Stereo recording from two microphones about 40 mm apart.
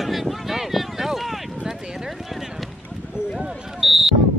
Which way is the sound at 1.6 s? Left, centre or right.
Centre.